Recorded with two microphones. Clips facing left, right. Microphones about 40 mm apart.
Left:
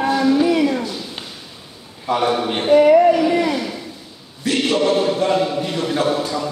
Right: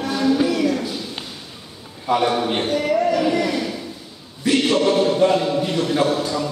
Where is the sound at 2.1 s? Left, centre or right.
Centre.